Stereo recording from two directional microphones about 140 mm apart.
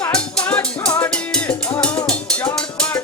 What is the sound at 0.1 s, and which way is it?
Music, 10° left (ahead or behind).